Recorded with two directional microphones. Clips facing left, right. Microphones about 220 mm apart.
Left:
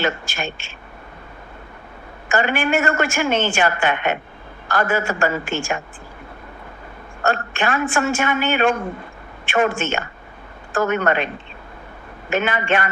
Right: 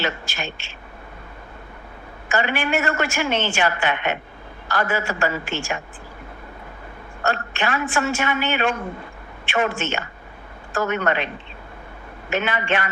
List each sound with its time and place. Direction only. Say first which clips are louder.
0.0 s a woman's voice: left 4 dB; 50° left (ahead or behind)
2.3 s a woman's voice: left 3 dB; 50° left (ahead or behind)
7.2 s a woman's voice: left 3 dB; 50° left (ahead or behind)
12.3 s a woman's voice: left 3 dB; 50° left (ahead or behind)